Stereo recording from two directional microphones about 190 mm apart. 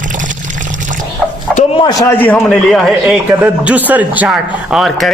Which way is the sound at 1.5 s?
25° left (ahead or behind).